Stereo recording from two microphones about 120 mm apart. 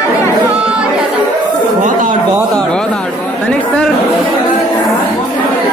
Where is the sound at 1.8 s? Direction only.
90° right.